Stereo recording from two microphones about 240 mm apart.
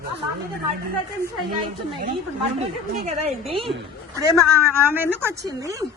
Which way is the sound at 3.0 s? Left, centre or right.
Right.